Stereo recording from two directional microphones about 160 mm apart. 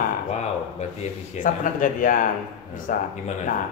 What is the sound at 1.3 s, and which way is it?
Speech, 55° left (ahead or behind).